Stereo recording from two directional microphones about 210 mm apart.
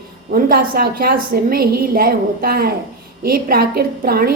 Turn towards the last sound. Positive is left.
turn(degrees=-45)  # may be behind; listen again after turning